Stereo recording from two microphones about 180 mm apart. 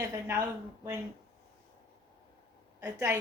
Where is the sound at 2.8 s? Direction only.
15° right (ahead or behind).